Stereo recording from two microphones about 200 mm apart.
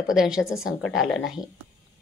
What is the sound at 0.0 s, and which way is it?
A woman's voice, 5° right (ahead or behind).